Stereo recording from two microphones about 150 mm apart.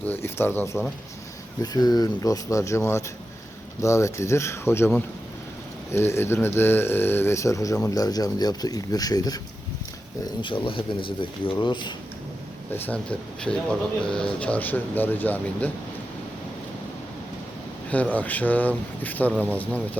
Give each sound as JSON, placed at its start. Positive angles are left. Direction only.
{"t": 0.1, "sound": "speech", "side_deg": 15}
{"t": 1.6, "sound": "speech", "side_deg": 25}
{"t": 5.9, "sound": "speech", "side_deg": 15}
{"t": 10.4, "sound": "speech", "side_deg": 35}
{"t": 12.7, "sound": "speech", "side_deg": 10}
{"t": 17.9, "sound": "speech", "side_deg": 10}